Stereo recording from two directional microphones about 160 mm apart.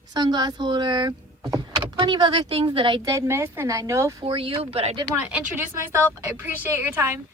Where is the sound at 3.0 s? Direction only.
20° right (ahead or behind).